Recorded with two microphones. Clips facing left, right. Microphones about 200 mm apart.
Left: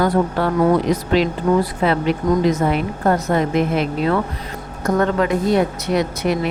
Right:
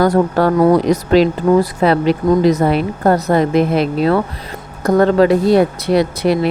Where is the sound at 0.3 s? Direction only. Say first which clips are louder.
Right 6 dB; 40° right (ahead or behind).